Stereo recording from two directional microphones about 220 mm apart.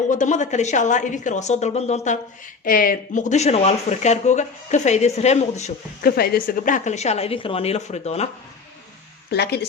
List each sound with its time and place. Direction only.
0.1 s speech: 35° left (ahead or behind)
6.1 s speech: 45° left (ahead or behind); by 8.3 s 30° left (ahead or behind)
9.3 s speech: 50° left (ahead or behind)